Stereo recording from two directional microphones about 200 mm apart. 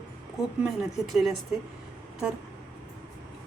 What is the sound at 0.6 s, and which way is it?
Speech, centre (ahead or behind).